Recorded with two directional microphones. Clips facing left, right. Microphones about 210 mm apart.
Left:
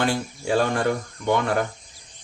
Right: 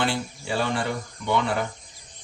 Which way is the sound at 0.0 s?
45° left (ahead or behind).